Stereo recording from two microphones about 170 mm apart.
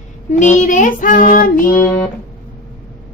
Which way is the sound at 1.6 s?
15° left (ahead or behind).